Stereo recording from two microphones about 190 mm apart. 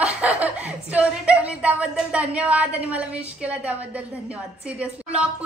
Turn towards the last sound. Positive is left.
turn(degrees=-5)  # may be behind; listen again after turning